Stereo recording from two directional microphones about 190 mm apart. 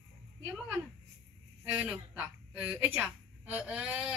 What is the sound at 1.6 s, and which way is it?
A woman's voice, 5° right (ahead or behind).